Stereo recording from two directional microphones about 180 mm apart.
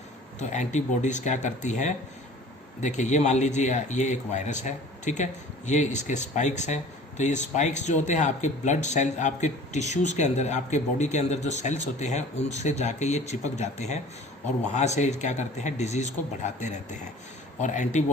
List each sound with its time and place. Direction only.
0.3 s speech: 40° left (ahead or behind)